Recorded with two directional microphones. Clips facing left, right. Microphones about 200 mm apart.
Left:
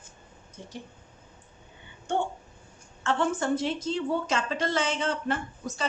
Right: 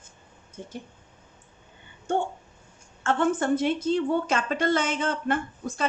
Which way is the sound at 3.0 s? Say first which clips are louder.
Right 3 dB; 55° right (ahead or behind).